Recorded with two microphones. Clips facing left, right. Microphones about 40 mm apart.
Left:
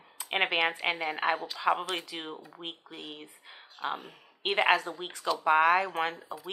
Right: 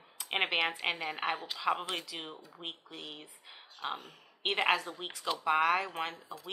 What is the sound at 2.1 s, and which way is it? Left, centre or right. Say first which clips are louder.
Speech: left 4 dB; left.